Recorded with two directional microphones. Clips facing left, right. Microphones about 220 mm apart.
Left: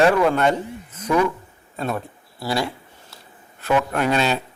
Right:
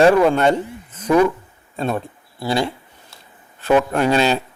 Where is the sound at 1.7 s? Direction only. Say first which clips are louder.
Right 3 dB; 25° right (ahead or behind).